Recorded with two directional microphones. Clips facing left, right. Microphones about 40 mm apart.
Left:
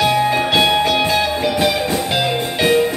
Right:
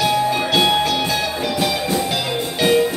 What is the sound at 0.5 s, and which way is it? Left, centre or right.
Music, left.